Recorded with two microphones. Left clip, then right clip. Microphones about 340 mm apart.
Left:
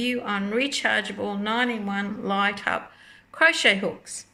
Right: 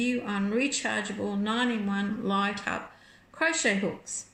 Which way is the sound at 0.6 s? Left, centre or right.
Left.